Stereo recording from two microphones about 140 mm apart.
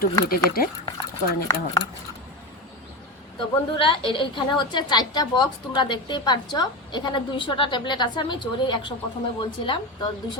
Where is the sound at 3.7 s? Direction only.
40° left (ahead or behind).